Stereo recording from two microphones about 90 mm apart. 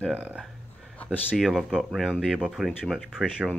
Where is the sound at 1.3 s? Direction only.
Centre (ahead or behind).